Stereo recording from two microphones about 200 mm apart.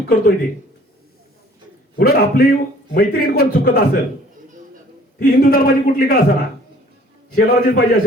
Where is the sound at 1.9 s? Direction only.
50° left (ahead or behind).